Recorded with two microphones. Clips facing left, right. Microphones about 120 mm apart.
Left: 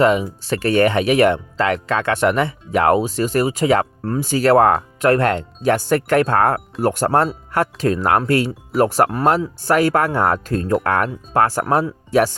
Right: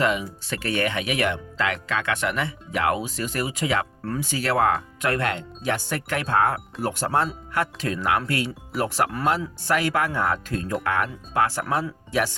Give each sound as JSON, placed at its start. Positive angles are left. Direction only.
{"t": 0.0, "sound": "speech", "side_deg": 35}